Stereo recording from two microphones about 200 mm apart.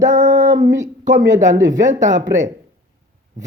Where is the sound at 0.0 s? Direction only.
40° right (ahead or behind).